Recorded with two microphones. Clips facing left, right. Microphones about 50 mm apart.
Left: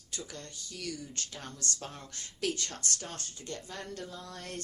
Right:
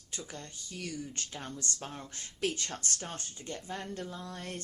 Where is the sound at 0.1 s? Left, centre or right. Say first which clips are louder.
Even; right.